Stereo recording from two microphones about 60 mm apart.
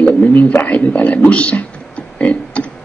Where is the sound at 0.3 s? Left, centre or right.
Left.